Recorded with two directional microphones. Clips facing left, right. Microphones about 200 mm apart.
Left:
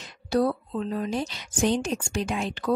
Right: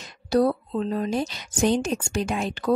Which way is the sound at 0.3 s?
40° right (ahead or behind).